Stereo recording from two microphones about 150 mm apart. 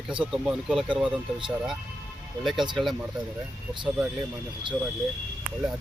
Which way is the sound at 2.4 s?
Centre (ahead or behind).